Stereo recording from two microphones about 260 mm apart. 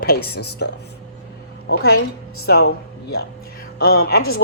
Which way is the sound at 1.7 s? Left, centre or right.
Left.